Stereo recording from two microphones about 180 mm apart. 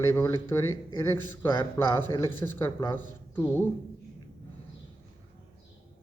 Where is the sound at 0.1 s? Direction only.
15° left (ahead or behind).